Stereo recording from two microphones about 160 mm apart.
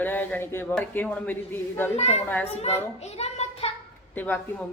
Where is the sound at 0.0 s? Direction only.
10° left (ahead or behind).